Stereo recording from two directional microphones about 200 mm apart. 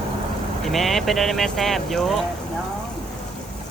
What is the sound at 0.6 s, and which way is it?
Speech, centre (ahead or behind).